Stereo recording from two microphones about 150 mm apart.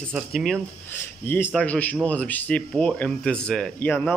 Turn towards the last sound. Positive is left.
turn(degrees=10)  # may be behind; listen again after turning